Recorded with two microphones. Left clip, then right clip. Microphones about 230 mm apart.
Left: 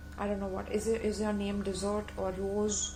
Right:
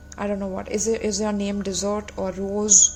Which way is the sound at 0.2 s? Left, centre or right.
Right.